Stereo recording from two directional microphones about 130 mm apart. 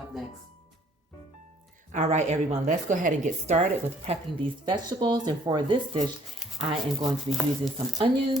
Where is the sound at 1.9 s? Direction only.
65° right (ahead or behind).